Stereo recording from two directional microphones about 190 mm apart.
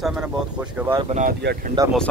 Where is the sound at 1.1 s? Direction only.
35° right (ahead or behind).